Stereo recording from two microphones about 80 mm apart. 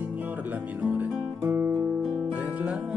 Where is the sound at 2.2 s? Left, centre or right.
Right.